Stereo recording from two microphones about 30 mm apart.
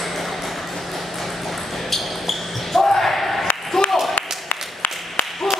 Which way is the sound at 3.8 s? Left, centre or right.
Centre.